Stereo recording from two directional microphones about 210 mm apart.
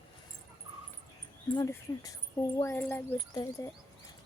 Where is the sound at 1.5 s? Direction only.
15° left (ahead or behind).